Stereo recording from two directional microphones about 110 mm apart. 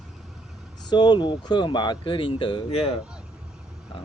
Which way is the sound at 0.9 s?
40° left (ahead or behind).